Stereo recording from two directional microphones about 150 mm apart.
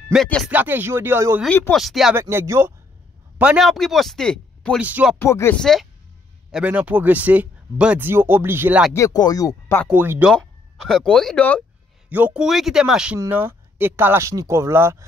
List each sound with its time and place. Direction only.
0.1 s speech: centre (ahead or behind)
0.5 s speech: 10° right (ahead or behind)
1.5 s speech: 10° left (ahead or behind)
1.8 s speech: centre (ahead or behind)
2.1 s speech: 15° right (ahead or behind)
3.3 s speech: 5° right (ahead or behind)
4.7 s speech: 10° right (ahead or behind)
5.2 s speech: 15° left (ahead or behind)
5.6 s speech: 5° left (ahead or behind)
6.5 s speech: 10° right (ahead or behind)
8.9 s speech: 25° left (ahead or behind)
9.8 s speech: 10° right (ahead or behind)
10.3 s speech: 5° left (ahead or behind)
12.1 s speech: 10° right (ahead or behind)